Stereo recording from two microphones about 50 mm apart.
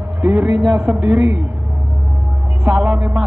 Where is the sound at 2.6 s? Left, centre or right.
Right.